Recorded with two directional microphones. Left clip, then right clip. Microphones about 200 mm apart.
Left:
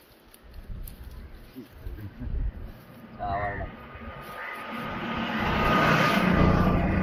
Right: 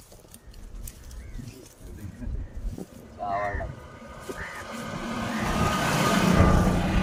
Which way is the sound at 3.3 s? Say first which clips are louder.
Right 2 dB; 30° right (ahead or behind).